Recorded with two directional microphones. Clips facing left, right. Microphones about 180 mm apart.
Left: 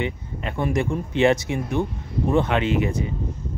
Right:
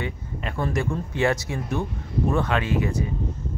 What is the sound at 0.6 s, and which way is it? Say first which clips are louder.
Speech: left 3 dB; 20° left (ahead or behind).